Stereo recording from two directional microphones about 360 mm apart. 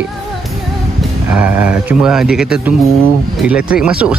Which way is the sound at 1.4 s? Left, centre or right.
Centre.